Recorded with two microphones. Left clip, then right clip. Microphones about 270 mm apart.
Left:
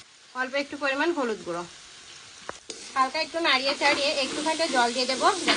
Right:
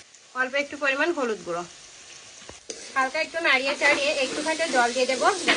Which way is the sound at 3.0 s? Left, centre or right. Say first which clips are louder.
Even; left.